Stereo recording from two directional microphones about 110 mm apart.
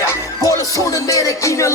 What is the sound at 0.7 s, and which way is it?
Music, 30° left (ahead or behind).